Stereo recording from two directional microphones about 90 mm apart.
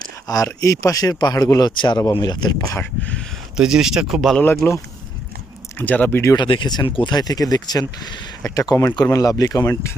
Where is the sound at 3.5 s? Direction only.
5° right (ahead or behind).